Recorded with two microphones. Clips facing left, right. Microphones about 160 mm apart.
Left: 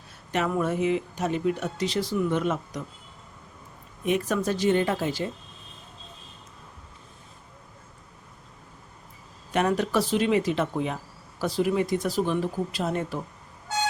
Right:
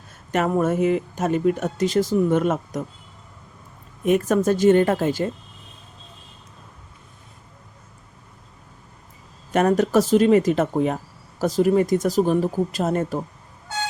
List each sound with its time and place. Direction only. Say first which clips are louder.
0.3 s speech: right 5 dB; 45° right (ahead or behind)
4.0 s speech: right 7 dB; 45° right (ahead or behind)
9.5 s speech: right 6 dB; 45° right (ahead or behind)